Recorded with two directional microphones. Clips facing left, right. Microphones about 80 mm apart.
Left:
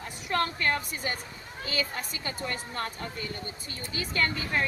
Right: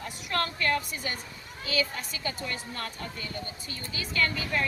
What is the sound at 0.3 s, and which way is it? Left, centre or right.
A woman's voice, left.